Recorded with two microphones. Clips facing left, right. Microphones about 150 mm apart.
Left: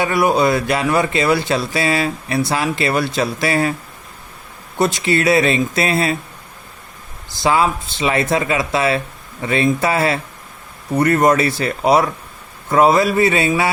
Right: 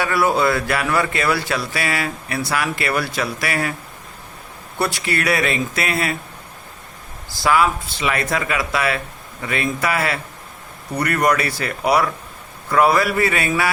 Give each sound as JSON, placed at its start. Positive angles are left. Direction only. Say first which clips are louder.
{"t": 0.0, "sound": "speech", "louder": "left 3 dB", "side_deg": 20}
{"t": 4.8, "sound": "speech", "louder": "left 5 dB", "side_deg": 20}
{"t": 7.4, "sound": "speech", "louder": "left 1 dB", "side_deg": 25}